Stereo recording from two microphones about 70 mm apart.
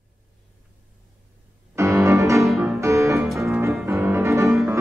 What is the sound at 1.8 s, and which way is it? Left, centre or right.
Music, right.